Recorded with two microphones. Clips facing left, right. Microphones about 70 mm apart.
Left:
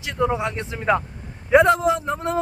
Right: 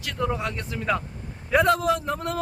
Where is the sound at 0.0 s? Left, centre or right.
Centre.